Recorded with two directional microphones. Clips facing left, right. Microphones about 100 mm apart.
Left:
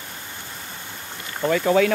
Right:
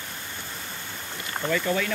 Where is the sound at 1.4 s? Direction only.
70° left (ahead or behind).